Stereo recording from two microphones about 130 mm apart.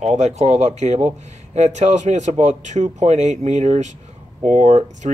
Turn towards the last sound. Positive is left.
turn(degrees=-70)  # may be behind; listen again after turning